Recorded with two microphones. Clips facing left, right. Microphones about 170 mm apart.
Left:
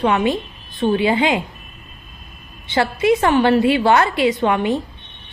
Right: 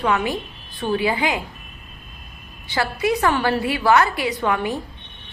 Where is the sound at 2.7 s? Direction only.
20° left (ahead or behind).